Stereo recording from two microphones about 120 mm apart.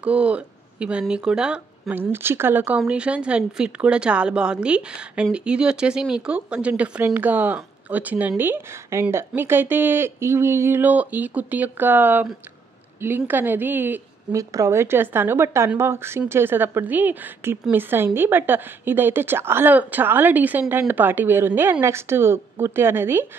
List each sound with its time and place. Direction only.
0.0 s a woman's voice: 10° right (ahead or behind)